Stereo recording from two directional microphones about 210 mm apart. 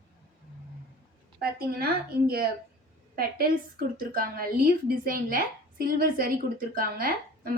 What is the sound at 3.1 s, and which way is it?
A woman's voice, 45° right (ahead or behind).